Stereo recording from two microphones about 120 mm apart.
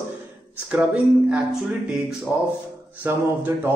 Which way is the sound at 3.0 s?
20° right (ahead or behind).